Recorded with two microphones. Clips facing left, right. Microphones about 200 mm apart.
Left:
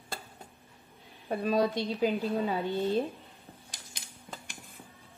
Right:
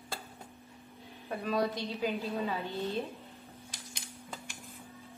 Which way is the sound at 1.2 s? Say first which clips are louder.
Left 4 dB; 30° left (ahead or behind).